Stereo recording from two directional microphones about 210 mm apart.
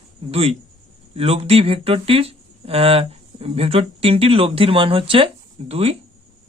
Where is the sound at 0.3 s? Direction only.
30° right (ahead or behind).